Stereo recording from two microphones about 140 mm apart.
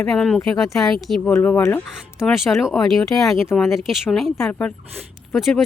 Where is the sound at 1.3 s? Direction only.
15° left (ahead or behind).